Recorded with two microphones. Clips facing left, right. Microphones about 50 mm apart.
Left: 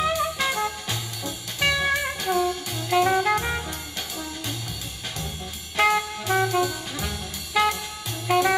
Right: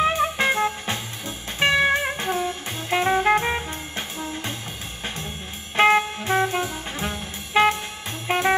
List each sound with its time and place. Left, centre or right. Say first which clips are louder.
0.0 s music: right 3 dB; right
5.8 s music: right 4 dB; right